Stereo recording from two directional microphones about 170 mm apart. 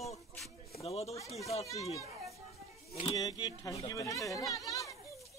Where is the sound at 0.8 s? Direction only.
40° left (ahead or behind).